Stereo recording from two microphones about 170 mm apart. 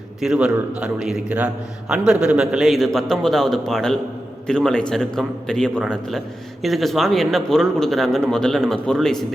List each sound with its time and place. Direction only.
0.2 s a man's voice: 5° right (ahead or behind)